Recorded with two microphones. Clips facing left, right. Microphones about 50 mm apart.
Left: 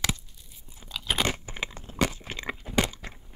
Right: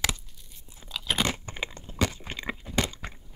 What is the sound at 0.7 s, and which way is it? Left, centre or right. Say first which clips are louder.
Crunch: even; centre.